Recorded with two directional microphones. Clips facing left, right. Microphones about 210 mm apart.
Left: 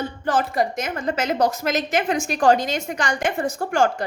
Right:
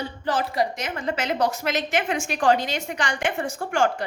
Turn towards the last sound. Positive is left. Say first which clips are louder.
# left 3 dB
turn(degrees=40)  # may be behind; listen again after turning